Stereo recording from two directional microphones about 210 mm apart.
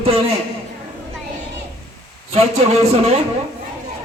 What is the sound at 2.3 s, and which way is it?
Speech, 30° right (ahead or behind).